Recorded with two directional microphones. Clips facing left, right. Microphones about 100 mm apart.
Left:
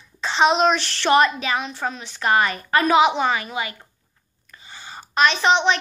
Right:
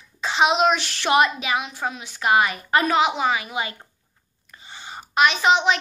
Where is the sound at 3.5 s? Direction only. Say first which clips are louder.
Even; 25° right (ahead or behind).